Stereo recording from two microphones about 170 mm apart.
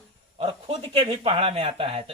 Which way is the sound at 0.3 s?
35° right (ahead or behind).